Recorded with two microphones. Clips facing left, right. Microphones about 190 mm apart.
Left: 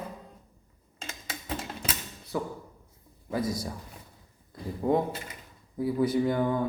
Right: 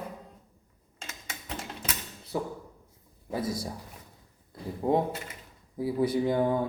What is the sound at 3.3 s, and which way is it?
Speech, 25° right (ahead or behind).